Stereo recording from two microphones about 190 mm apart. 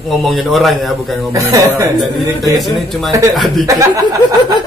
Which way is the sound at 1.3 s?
15° right (ahead or behind).